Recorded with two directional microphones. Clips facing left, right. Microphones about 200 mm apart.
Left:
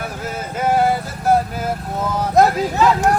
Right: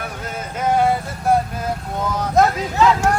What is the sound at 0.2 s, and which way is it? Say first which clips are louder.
Vehicle: left 2 dB; 5° left (ahead or behind).